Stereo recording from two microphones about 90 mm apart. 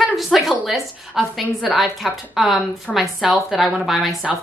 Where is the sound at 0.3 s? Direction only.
Centre (ahead or behind).